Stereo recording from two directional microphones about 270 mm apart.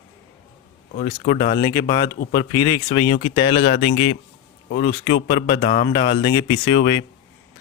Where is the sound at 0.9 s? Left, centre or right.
Left.